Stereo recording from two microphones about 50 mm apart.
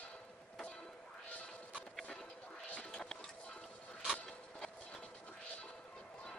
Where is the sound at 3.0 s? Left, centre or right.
Centre.